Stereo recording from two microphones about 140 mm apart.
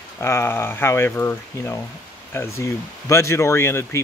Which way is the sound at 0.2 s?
20° left (ahead or behind).